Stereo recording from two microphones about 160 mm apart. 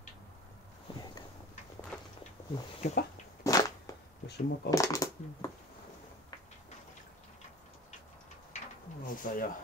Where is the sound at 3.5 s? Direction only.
20° left (ahead or behind).